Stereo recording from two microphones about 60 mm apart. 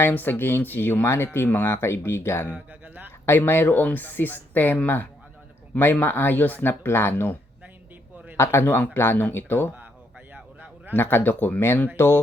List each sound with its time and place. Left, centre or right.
0.1 s speech: left
2.8 s a sound: right
3.2 s speech: left
8.4 s speech: left
10.3 s a sound: right
10.9 s speech: left
11.9 s speech: left